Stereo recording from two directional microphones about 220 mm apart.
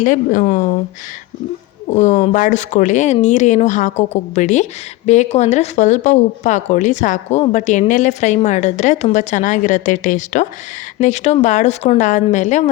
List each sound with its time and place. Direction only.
0.0 s speech: 35° left (ahead or behind)
2.0 s speech: 30° left (ahead or behind)